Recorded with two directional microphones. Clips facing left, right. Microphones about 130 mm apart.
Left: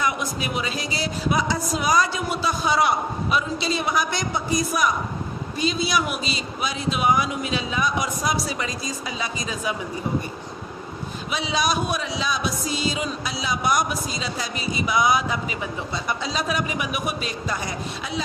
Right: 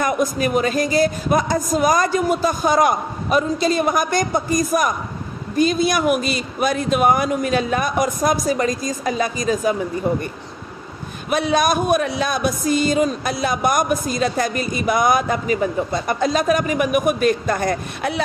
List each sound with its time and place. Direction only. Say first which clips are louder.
0.0 s speech: right 7 dB; 45° right (ahead or behind)
11.3 s speech: right 7 dB; 55° right (ahead or behind)